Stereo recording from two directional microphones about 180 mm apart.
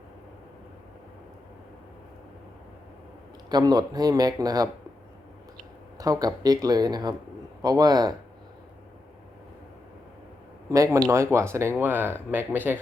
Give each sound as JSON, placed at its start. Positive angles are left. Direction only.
{"t": 3.5, "sound": "speech", "side_deg": -20}
{"t": 6.0, "sound": "speech", "side_deg": -20}
{"t": 10.7, "sound": "speech", "side_deg": -15}